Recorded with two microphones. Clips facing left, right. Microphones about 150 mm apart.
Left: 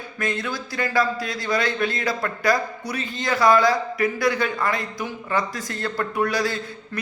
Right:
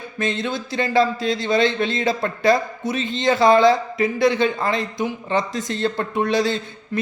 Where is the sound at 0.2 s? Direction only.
25° right (ahead or behind).